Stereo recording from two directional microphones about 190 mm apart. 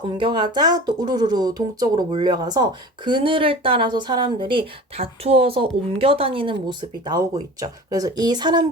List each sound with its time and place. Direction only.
0.2 s speech: 25° right (ahead or behind)